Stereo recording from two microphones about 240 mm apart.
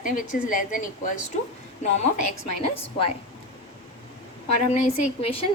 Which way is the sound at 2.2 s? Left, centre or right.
Left.